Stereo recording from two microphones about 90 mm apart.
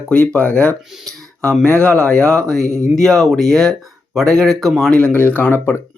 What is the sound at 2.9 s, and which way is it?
Speech, 5° left (ahead or behind).